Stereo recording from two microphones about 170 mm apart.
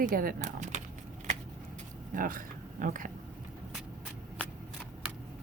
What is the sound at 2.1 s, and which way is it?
Speech, 55° right (ahead or behind).